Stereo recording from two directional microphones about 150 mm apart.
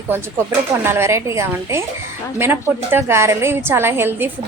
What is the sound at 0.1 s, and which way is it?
A woman's voice, 15° right (ahead or behind).